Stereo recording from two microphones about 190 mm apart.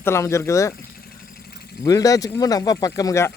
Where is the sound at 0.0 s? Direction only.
15° left (ahead or behind).